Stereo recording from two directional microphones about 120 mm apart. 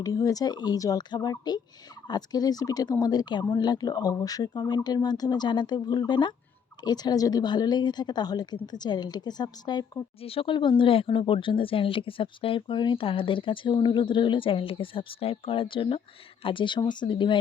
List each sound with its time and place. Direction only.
0.0 s speech: 30° left (ahead or behind)
10.2 s speech: 50° left (ahead or behind)